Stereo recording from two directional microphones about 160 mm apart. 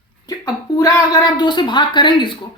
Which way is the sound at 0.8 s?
25° left (ahead or behind).